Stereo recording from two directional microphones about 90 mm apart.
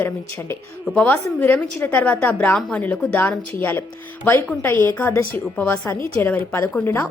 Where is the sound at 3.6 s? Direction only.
25° left (ahead or behind).